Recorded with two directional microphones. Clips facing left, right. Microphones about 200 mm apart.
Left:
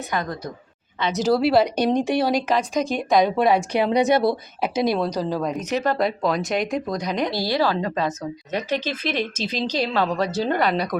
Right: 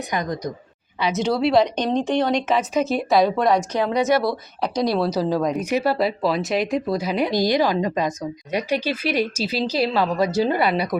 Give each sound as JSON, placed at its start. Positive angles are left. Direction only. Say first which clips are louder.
{"t": 0.1, "sound": "speech", "louder": "right 2 dB", "side_deg": -15}
{"t": 1.2, "sound": "a woman's voice", "louder": "left 1 dB", "side_deg": 5}
{"t": 4.6, "sound": "a woman's voice", "louder": "even", "side_deg": 5}
{"t": 4.9, "sound": "speech", "louder": "right 3 dB", "side_deg": -5}